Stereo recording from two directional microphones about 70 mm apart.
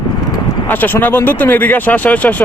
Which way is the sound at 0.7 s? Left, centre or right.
Left.